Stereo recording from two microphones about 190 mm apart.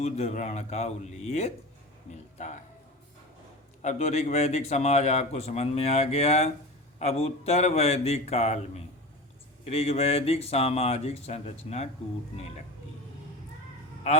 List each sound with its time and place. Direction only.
0.0 s speech: 35° left (ahead or behind)
3.8 s speech: 35° left (ahead or behind)